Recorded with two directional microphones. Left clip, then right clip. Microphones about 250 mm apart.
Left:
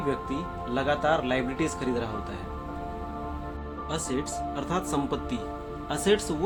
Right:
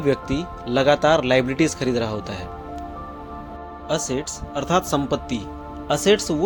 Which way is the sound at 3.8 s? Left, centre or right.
Right.